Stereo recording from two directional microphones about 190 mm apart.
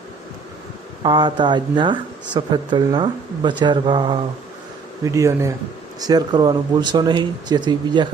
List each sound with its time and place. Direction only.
1.0 s speech: 25° right (ahead or behind)
5.0 s speech: 15° right (ahead or behind)